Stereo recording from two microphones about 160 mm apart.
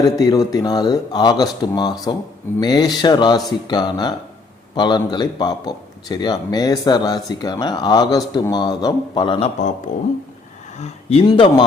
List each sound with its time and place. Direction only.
0.0 s a man's voice: 25° left (ahead or behind)
9.9 s speech: 50° left (ahead or behind)
10.8 s speech: 40° left (ahead or behind)
11.3 s a man's voice: 25° left (ahead or behind)